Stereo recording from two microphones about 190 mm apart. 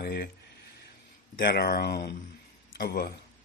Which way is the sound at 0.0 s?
55° left (ahead or behind).